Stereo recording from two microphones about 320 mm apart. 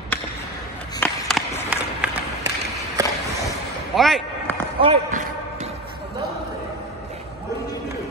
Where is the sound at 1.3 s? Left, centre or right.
Centre.